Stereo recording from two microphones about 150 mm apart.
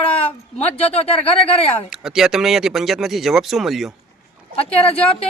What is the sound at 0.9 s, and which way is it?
Speech, 40° left (ahead or behind).